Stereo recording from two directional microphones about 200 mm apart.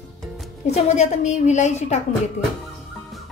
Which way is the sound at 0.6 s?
35° left (ahead or behind).